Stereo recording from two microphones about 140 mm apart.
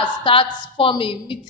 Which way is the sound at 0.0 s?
40° left (ahead or behind).